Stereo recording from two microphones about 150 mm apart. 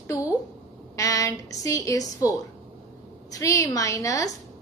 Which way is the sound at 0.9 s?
20° left (ahead or behind).